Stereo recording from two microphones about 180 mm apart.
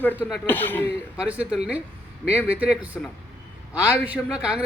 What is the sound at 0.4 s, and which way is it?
Speech, 10° left (ahead or behind).